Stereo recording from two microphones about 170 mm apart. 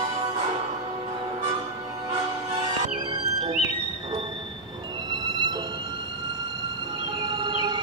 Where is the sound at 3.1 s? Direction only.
25° right (ahead or behind).